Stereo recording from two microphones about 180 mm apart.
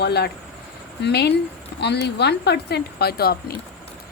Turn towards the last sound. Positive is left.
turn(degrees=60)  # may be behind; listen again after turning